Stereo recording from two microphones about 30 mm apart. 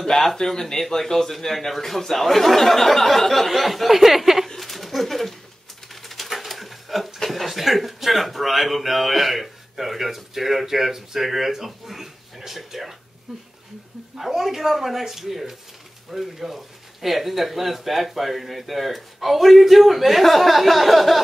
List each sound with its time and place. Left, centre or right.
0.4 s a man's voice: centre
4.6 s bird: centre
6.0 s pigeon: centre
7.2 s speech: centre